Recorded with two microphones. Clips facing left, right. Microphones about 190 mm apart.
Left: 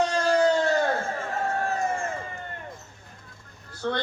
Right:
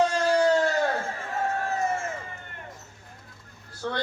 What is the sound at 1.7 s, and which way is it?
Crowd, 20° right (ahead or behind).